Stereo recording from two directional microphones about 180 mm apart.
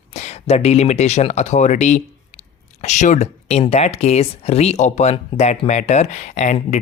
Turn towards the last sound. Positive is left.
turn(degrees=40)  # may be behind; listen again after turning